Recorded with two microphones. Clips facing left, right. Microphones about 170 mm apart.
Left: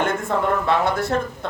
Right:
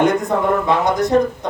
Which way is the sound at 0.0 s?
15° right (ahead or behind).